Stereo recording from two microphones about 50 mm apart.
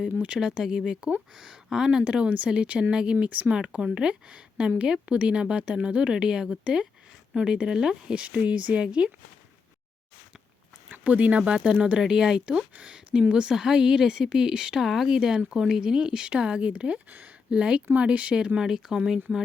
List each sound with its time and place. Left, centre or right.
0.0 s speech: right
0.3 s speech: centre
8.1 s speech: right
11.0 s speech: right
17.1 s speech: right
17.5 s speech: right
18.3 s speech: centre